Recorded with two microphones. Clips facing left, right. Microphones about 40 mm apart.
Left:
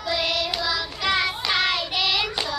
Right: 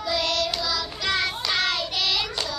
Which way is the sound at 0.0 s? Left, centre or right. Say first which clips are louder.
Even; centre.